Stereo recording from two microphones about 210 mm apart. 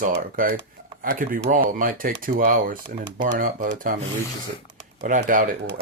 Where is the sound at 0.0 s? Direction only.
40° right (ahead or behind).